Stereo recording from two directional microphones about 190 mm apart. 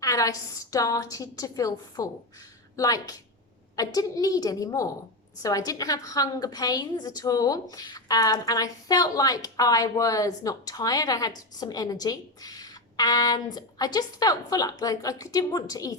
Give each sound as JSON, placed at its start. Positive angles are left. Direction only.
{"t": 0.0, "sound": "a woman's voice", "side_deg": 15}